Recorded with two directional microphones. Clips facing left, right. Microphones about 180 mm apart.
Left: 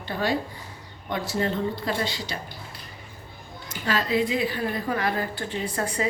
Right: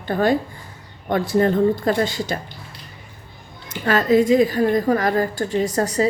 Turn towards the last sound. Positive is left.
turn(degrees=-40)  # may be behind; listen again after turning